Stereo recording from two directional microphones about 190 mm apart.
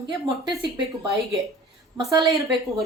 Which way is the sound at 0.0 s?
25° right (ahead or behind).